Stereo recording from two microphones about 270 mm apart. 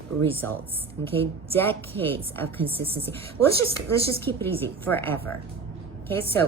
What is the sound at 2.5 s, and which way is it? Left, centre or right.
Speech, centre.